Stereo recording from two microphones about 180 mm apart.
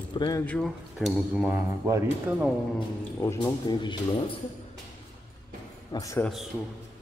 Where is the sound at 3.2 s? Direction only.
25° left (ahead or behind).